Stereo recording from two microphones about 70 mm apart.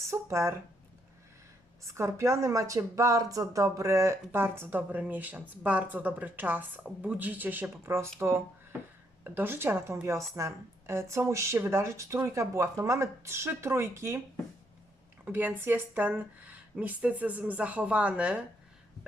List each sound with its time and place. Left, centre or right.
0.0 s speech: right
1.9 s speech: right
4.3 s a woman's voice: right
9.2 s a woman's voice: right
10.1 s speech: right
15.2 s speech: right